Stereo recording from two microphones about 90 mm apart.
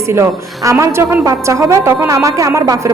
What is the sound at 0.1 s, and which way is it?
A woman's voice, 35° right (ahead or behind).